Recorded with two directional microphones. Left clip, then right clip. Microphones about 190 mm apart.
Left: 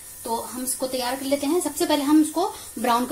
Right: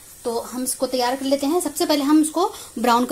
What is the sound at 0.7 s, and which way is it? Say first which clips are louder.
A woman's voice: right 5 dB; 50° right (ahead or behind).